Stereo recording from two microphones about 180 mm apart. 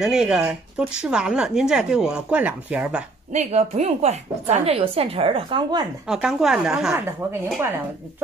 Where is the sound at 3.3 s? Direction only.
40° right (ahead or behind); by 5.8 s 25° right (ahead or behind).